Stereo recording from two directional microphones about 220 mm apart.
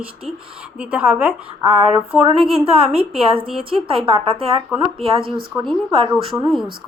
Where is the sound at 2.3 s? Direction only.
25° right (ahead or behind).